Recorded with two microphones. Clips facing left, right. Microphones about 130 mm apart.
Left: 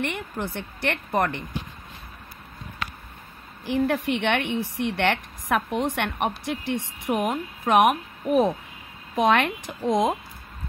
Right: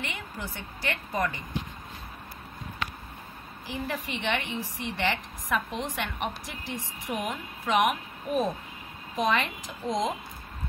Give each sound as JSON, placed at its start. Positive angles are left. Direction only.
{"t": 0.0, "sound": "speech", "side_deg": 55}
{"t": 3.6, "sound": "speech", "side_deg": 65}